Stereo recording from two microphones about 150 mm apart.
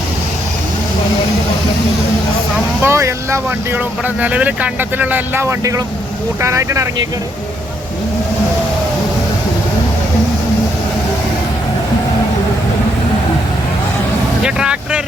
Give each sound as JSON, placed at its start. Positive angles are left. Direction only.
{"t": 2.8, "sound": "speech", "side_deg": -20}
{"t": 14.4, "sound": "vehicle", "side_deg": -5}